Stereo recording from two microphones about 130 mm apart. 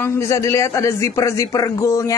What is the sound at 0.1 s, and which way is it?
Speech, 20° left (ahead or behind).